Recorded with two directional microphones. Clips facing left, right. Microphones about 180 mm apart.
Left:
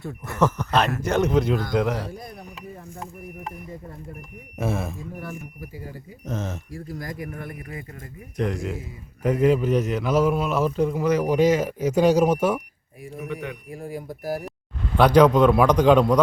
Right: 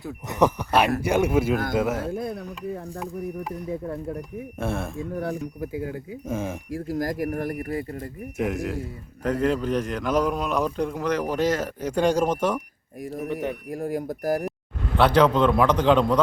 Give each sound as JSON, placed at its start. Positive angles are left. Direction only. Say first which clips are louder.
{"t": 0.3, "sound": "speech", "louder": "right 1 dB", "side_deg": -15}
{"t": 2.1, "sound": "speech", "louder": "right 8 dB", "side_deg": -65}
{"t": 3.7, "sound": "speech", "louder": "right 9 dB", "side_deg": -80}
{"t": 4.5, "sound": "speech", "louder": "left 2 dB", "side_deg": 5}
{"t": 6.2, "sound": "speech", "louder": "right 1 dB", "side_deg": -10}
{"t": 6.8, "sound": "speech", "louder": "right 8 dB", "side_deg": -40}
{"t": 8.4, "sound": "a man's voice", "louder": "even", "side_deg": 0}
{"t": 13.0, "sound": "speech", "louder": "right 4 dB", "side_deg": -40}
{"t": 14.9, "sound": "a man's voice", "louder": "left 3 dB", "side_deg": 10}